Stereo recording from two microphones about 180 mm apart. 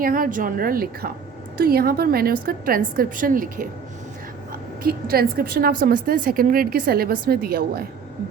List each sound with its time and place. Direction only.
0.0 s a woman's voice: 50° right (ahead or behind)
4.8 s a woman's voice: 55° right (ahead or behind)